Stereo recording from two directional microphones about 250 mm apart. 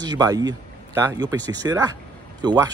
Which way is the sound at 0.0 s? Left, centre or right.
Centre.